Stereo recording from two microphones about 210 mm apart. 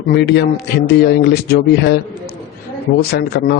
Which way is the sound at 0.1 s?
50° left (ahead or behind).